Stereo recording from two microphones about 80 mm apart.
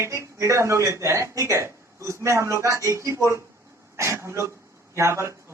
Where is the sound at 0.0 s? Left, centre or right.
Right.